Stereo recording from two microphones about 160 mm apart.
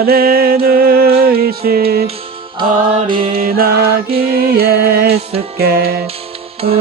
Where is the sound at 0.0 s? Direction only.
70° right (ahead or behind).